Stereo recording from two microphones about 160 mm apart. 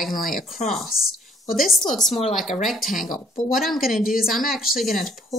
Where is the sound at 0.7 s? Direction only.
Centre (ahead or behind).